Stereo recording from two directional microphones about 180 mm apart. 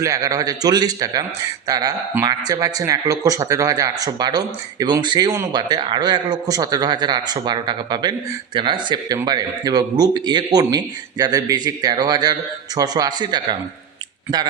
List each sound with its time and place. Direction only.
0.0 s speech: 20° right (ahead or behind)